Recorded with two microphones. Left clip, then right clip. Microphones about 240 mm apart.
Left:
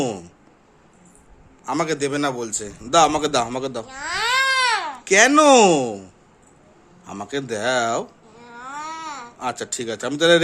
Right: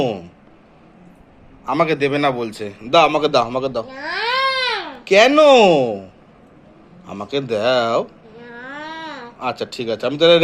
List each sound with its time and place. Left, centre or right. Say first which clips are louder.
0.0 s speech: right 4 dB; left
1.8 s a man's voice: right 6 dB; centre; by 3.7 s left
3.8 s baby cry: right 2 dB; left
5.1 s a man's voice: right 3 dB; left
8.5 s babbling: even; centre
9.4 s a man's voice: right 4 dB; left